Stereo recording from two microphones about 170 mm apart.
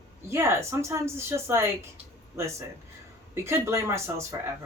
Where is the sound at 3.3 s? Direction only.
15° right (ahead or behind).